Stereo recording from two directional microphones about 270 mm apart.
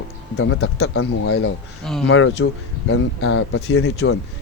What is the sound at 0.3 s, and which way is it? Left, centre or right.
Speech, left.